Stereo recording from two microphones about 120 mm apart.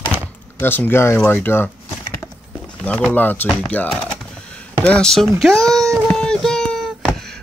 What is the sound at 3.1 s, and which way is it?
Speech, 15° left (ahead or behind).